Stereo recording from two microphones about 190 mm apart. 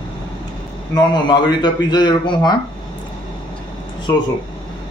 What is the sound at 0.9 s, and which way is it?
Speech, 20° left (ahead or behind).